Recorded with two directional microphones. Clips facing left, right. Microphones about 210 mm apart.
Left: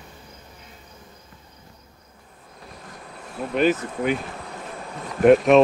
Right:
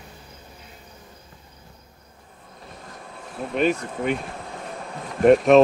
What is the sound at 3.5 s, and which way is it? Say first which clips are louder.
Speech: left 2 dB; centre (ahead or behind).